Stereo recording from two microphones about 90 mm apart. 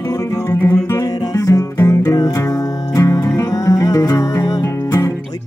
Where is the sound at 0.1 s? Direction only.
40° left (ahead or behind).